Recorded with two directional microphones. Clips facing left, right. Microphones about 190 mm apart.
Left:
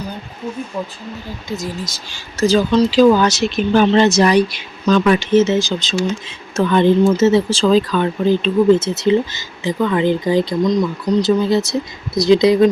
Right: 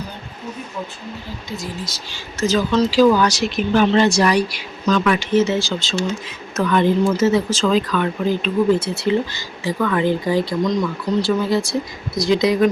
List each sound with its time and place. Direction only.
1.5 s speech: 45° left (ahead or behind)
2.7 s speech: 20° left (ahead or behind)